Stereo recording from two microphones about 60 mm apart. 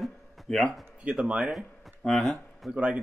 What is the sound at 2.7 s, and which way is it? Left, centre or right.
Speech, centre.